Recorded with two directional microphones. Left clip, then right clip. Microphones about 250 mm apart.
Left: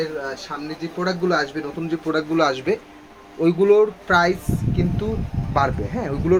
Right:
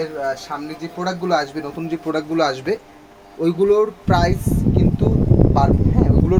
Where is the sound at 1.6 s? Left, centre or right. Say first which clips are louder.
Right 1 dB; right.